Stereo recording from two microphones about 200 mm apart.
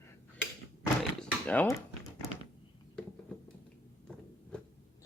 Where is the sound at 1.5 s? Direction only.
10° left (ahead or behind).